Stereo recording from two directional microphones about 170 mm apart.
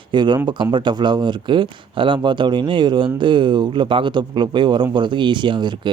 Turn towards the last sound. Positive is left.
turn(degrees=-25)  # may be behind; listen again after turning